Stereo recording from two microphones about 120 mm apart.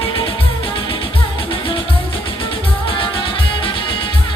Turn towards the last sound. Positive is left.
turn(degrees=45)  # may be behind; listen again after turning